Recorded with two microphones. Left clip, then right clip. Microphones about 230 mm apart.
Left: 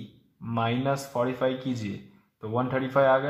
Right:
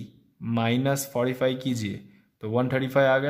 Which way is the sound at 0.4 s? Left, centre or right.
Right.